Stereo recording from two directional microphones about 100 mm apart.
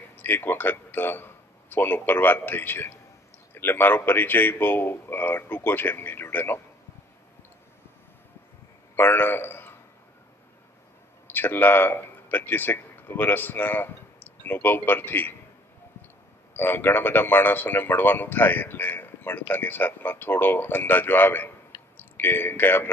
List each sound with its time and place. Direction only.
0.2 s a man's voice: 20° left (ahead or behind)
8.9 s a man's voice: 20° left (ahead or behind)
11.2 s speech: 20° left (ahead or behind)
16.5 s a man's voice: 20° left (ahead or behind)